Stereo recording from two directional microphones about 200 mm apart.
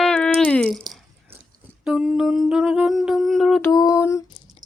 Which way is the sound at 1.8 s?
5° right (ahead or behind).